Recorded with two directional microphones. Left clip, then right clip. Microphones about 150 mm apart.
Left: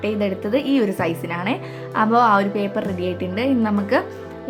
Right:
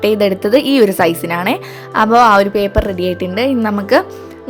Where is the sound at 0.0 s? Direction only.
60° right (ahead or behind).